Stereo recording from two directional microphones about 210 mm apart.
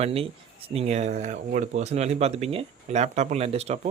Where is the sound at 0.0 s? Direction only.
30° right (ahead or behind).